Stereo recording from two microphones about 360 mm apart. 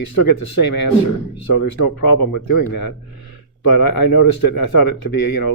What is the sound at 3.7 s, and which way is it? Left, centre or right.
Speech, left.